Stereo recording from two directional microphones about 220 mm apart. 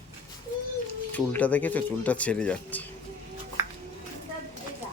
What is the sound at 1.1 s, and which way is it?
Speech, 5° left (ahead or behind).